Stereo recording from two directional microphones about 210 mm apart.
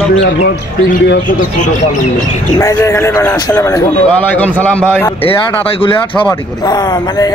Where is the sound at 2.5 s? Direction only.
15° left (ahead or behind).